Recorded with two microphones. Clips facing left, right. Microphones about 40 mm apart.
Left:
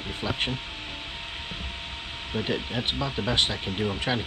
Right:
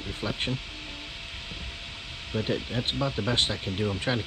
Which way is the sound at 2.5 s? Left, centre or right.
Left.